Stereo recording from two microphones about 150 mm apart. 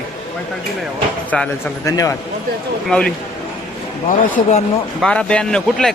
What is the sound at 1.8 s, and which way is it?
Speech, 20° left (ahead or behind).